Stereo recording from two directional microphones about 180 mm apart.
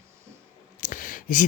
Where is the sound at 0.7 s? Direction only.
45° left (ahead or behind).